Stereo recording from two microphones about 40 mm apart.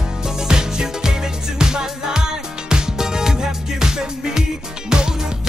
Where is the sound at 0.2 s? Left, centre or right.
Centre.